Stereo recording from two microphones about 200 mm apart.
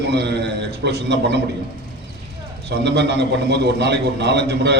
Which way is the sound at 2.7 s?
60° right (ahead or behind).